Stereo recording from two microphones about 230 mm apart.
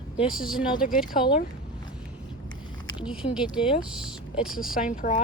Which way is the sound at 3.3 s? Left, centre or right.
Centre.